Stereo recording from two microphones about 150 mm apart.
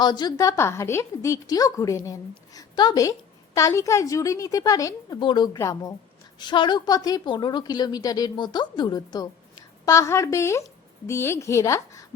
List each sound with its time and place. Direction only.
0.0 s a woman's voice: 30° left (ahead or behind)